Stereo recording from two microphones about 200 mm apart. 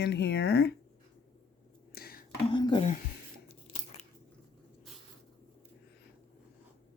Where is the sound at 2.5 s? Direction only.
25° left (ahead or behind).